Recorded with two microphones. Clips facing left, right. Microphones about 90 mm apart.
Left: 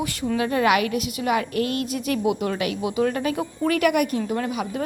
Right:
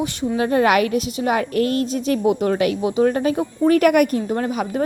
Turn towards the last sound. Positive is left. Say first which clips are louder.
# right 4 dB
turn(degrees=-40)  # may be behind; listen again after turning